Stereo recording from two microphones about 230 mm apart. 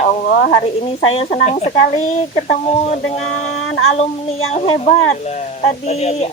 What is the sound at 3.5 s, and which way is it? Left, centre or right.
Child singing, left.